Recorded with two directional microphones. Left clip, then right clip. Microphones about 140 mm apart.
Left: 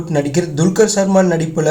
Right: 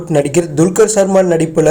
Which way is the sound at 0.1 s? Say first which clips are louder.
Right 5 dB; 50° right (ahead or behind).